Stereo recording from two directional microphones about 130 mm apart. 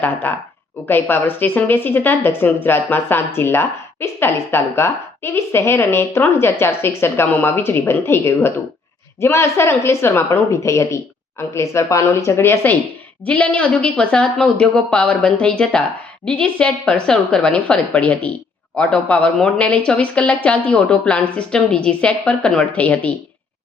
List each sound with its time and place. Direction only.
0.0 s speech: 15° left (ahead or behind)